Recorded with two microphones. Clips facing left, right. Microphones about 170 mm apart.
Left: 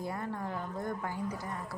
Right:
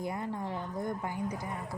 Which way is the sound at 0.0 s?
15° right (ahead or behind).